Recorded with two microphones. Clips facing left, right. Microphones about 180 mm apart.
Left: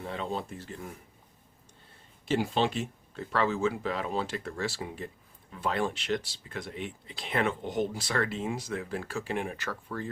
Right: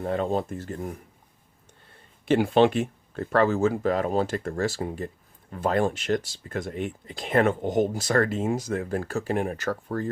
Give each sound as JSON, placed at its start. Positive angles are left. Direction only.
{"t": 0.0, "sound": "speech", "side_deg": -50}
{"t": 2.2, "sound": "speech", "side_deg": -60}